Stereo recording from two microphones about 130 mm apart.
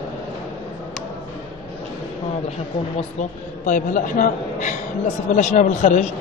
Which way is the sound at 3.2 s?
90° left.